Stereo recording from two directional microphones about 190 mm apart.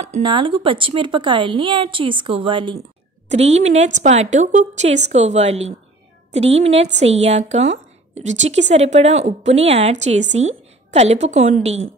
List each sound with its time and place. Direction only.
0.0 s speech: 30° right (ahead or behind)
3.3 s a woman's voice: 35° right (ahead or behind)